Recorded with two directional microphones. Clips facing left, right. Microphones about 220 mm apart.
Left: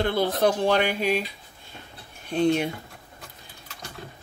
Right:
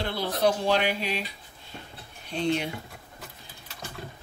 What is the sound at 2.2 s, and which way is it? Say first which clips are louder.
Speech: left 5 dB; 50° left (ahead or behind).